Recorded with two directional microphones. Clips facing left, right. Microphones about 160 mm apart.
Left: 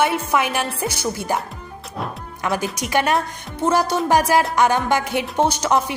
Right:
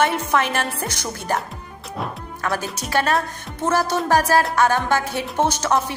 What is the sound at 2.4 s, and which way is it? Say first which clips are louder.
A woman's voice: left 2 dB; 15° left (ahead or behind).